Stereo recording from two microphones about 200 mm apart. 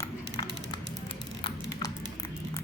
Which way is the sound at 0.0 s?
20° left (ahead or behind).